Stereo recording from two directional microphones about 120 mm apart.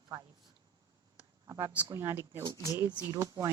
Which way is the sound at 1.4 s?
25° right (ahead or behind).